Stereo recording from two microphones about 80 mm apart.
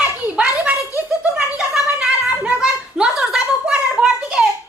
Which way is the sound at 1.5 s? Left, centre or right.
Centre.